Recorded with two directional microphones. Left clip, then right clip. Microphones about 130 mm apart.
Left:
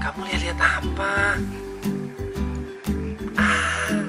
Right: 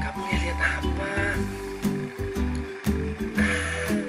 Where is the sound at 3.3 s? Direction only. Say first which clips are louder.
Left 6 dB; 20° left (ahead or behind).